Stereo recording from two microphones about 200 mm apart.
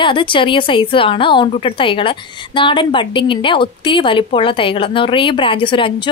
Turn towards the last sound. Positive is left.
turn(degrees=25)  # may be behind; listen again after turning